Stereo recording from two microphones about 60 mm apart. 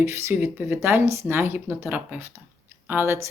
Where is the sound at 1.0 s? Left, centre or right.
Right.